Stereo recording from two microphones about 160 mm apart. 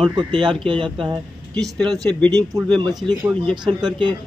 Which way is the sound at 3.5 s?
30° right (ahead or behind).